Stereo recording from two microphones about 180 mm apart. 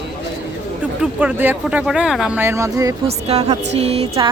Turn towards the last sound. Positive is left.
turn(degrees=-35)  # may be behind; listen again after turning